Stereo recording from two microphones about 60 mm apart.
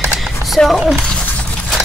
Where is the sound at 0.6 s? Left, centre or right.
Centre.